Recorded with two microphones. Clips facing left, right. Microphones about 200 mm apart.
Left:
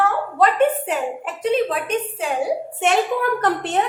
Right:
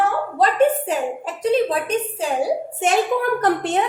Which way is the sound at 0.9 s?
35° right (ahead or behind).